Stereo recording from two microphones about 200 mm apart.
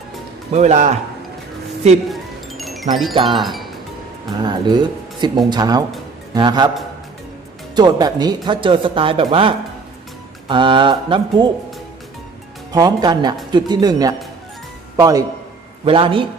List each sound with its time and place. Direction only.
0.5 s speech: 35° right (ahead or behind)
2.6 s music: centre (ahead or behind)
3.2 s speech: 25° right (ahead or behind)
3.4 s speech: centre (ahead or behind)
4.4 s speech: 20° right (ahead or behind)
7.8 s speech: 20° right (ahead or behind)
12.7 s speech: 20° right (ahead or behind)